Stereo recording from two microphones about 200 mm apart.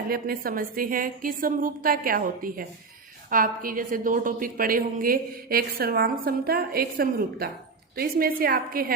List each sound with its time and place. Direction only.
0.1 s a woman's voice: 45° right (ahead or behind)